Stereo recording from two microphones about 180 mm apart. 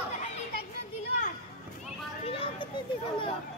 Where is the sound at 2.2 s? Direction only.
30° left (ahead or behind).